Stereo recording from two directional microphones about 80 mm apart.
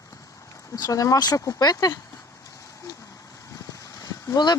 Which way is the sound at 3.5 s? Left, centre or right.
Left.